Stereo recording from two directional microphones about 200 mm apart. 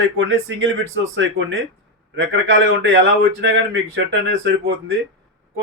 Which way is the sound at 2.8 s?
65° right (ahead or behind).